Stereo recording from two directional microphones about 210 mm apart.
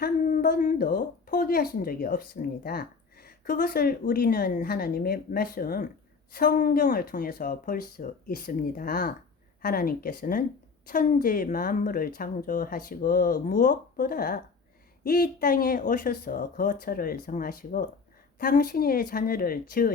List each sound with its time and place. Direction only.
0.0 s speech: 45° left (ahead or behind)